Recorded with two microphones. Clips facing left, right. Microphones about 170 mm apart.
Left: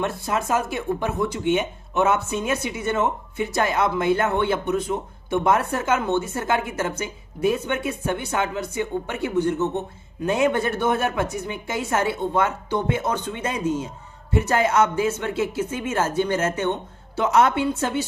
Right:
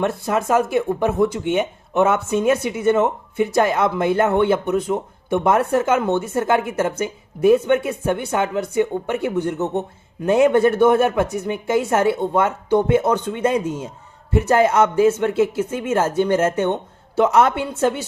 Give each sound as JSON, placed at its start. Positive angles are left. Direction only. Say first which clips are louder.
{"t": 0.0, "sound": "speech", "louder": "right 4 dB", "side_deg": -55}